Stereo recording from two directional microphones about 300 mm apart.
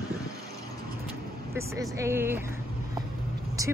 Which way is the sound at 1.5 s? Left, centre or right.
Centre.